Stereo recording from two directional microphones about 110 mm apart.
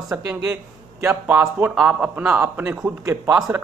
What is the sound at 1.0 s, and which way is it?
Speech, 15° right (ahead or behind).